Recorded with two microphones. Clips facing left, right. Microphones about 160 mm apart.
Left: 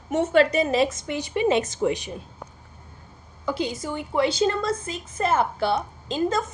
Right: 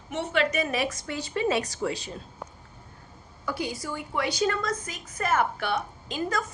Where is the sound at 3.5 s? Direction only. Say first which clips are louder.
Left 5 dB; 25° left (ahead or behind).